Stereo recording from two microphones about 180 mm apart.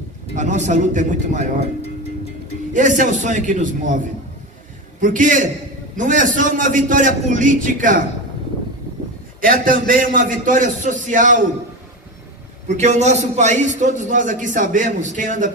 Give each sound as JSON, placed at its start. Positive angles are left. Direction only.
{"t": 0.4, "sound": "a man's voice", "side_deg": -45}
{"t": 2.7, "sound": "a man's voice", "side_deg": -45}
{"t": 5.0, "sound": "a man's voice", "side_deg": -45}
{"t": 9.4, "sound": "a man's voice", "side_deg": -50}
{"t": 12.6, "sound": "a man's voice", "side_deg": -40}